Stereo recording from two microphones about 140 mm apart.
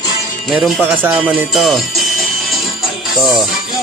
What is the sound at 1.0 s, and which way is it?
Speech, 5° right (ahead or behind).